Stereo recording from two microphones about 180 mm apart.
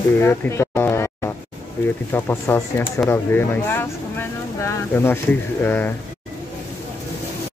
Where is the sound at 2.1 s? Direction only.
15° left (ahead or behind).